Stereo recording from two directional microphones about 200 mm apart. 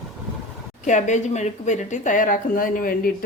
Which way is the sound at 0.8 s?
35° left (ahead or behind).